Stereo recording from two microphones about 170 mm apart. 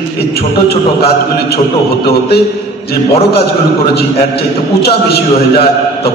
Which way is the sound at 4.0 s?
70° left (ahead or behind).